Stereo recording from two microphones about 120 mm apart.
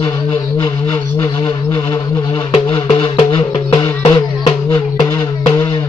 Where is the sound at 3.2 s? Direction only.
40° left (ahead or behind).